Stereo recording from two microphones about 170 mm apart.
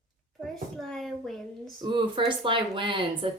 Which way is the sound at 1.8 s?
25° right (ahead or behind).